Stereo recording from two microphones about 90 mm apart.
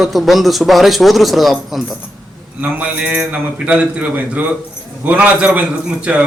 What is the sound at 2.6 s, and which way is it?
A man's voice, 15° right (ahead or behind).